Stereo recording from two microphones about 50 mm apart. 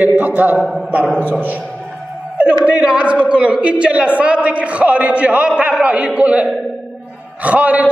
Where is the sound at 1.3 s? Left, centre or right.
Right.